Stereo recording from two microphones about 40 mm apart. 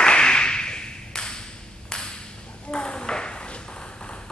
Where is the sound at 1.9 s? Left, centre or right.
Centre.